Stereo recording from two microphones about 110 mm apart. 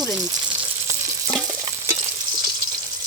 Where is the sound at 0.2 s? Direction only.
35° right (ahead or behind).